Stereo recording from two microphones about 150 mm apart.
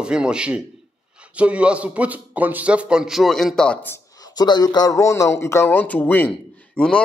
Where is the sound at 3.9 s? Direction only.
25° left (ahead or behind).